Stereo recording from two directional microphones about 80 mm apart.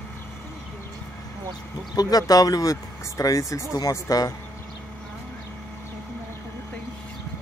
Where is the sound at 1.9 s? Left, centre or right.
Left.